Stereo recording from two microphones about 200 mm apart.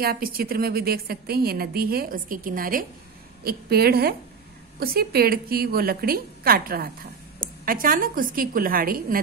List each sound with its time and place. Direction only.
0.0 s a woman's voice: 50° right (ahead or behind)